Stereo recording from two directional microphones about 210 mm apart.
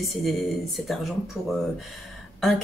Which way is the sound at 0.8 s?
Centre (ahead or behind).